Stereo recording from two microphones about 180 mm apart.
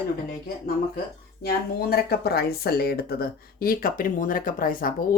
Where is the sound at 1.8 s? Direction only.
60° left (ahead or behind).